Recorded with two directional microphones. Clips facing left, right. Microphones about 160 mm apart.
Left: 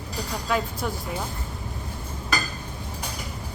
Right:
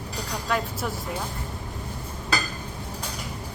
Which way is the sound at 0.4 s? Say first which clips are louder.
Left 1 dB; centre (ahead or behind).